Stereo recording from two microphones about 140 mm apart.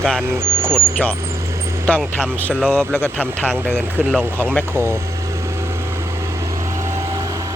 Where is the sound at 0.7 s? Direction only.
10° left (ahead or behind).